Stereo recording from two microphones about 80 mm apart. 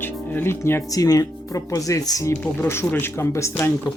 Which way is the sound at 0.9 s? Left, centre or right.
Left.